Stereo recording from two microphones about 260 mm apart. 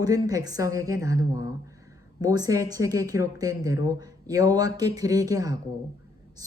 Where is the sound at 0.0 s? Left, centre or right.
Centre.